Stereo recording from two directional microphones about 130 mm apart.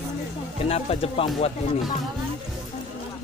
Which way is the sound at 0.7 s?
50° left (ahead or behind).